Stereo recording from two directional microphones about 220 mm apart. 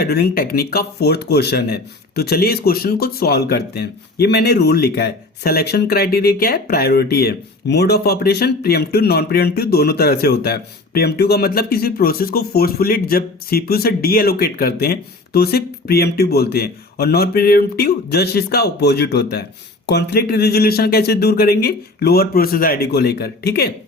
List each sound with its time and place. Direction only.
0.0 s speech: 45° left (ahead or behind)